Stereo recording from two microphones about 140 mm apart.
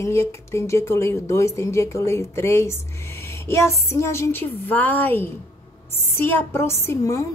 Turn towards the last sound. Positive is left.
turn(degrees=20)  # may be behind; listen again after turning